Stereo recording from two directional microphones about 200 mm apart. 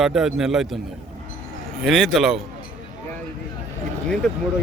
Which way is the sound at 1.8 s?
Centre (ahead or behind).